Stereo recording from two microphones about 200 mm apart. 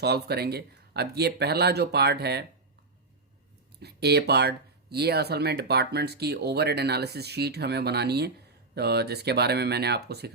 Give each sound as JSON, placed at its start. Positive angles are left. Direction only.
{"t": 0.0, "sound": "speech", "side_deg": -55}
{"t": 3.8, "sound": "speech", "side_deg": -55}